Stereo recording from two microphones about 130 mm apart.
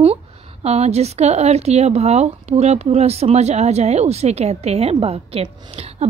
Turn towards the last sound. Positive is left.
turn(degrees=-50)  # may be behind; listen again after turning